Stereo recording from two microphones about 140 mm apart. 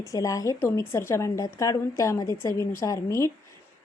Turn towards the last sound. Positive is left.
turn(degrees=20)  # may be behind; listen again after turning